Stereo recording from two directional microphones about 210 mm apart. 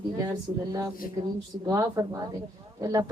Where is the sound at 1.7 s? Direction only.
15° right (ahead or behind).